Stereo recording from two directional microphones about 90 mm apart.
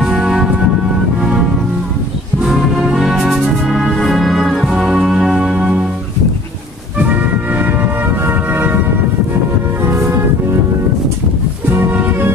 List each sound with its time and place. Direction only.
0.0 s music: 5° right (ahead or behind)
2.4 s music: 5° right (ahead or behind)
7.5 s music: 20° right (ahead or behind)
11.8 s music: 25° right (ahead or behind)